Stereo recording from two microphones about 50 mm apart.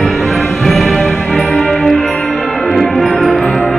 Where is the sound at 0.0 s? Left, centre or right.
Centre.